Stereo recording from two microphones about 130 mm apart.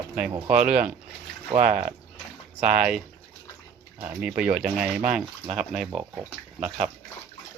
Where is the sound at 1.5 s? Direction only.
80° right.